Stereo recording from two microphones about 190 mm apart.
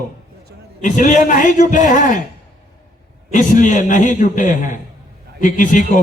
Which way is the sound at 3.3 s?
40° left (ahead or behind).